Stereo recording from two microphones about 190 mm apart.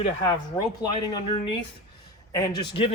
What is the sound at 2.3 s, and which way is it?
Speech, 20° left (ahead or behind).